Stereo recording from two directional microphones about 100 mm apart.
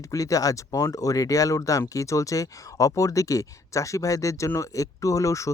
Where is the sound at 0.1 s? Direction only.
35° left (ahead or behind).